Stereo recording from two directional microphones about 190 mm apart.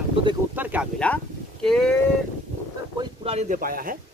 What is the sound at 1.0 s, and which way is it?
Speech, 5° left (ahead or behind).